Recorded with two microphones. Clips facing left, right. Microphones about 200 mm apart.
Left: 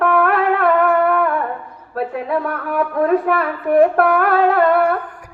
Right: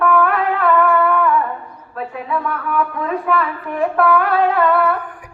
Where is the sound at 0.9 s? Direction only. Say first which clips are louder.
Even; 50° left (ahead or behind).